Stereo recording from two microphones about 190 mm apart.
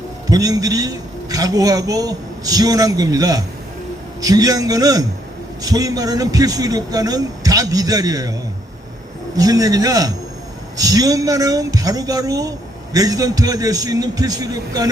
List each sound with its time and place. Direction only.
0.3 s speech: 20° right (ahead or behind)
9.3 s speech: 20° right (ahead or behind)